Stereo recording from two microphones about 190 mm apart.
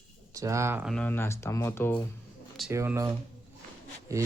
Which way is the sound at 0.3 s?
15° right (ahead or behind).